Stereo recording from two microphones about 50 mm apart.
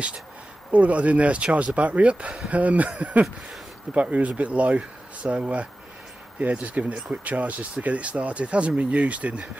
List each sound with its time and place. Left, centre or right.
0.7 s speech: right